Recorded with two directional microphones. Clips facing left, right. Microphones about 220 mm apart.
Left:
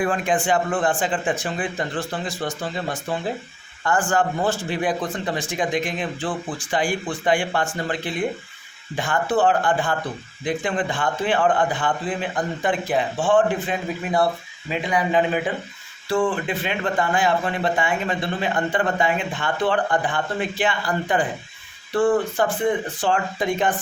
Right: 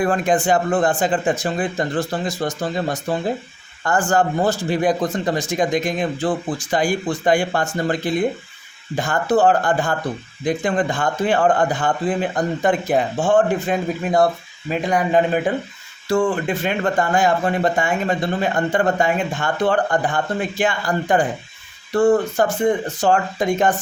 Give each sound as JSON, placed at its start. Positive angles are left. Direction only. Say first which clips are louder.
{"t": 0.0, "sound": "speech", "louder": "right 4 dB", "side_deg": -40}